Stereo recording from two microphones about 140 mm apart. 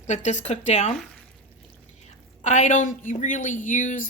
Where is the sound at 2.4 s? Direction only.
60° left (ahead or behind).